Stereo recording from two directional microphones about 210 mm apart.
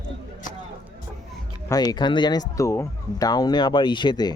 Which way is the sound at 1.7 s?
20° left (ahead or behind).